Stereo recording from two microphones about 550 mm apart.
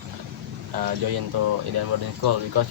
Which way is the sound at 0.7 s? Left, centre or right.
Right.